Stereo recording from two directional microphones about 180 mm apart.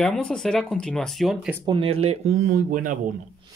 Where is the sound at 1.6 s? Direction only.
30° right (ahead or behind); by 2.9 s 50° right (ahead or behind).